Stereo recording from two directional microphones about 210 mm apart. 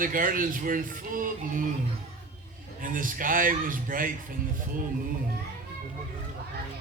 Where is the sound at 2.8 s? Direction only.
40° right (ahead or behind).